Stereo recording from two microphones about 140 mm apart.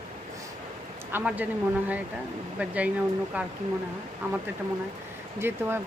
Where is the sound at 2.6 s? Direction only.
10° right (ahead or behind).